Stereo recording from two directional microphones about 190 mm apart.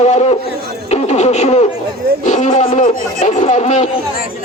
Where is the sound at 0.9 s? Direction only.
35° left (ahead or behind).